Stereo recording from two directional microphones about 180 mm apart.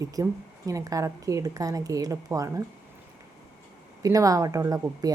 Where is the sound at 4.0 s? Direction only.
20° right (ahead or behind).